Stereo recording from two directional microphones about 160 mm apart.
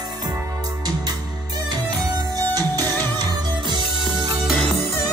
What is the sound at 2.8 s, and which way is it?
Music, 15° left (ahead or behind).